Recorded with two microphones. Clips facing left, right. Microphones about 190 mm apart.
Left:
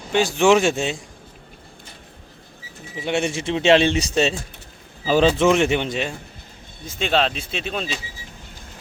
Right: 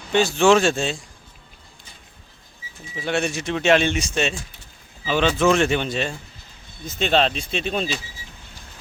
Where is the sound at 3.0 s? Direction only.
20° left (ahead or behind); by 7.9 s centre (ahead or behind).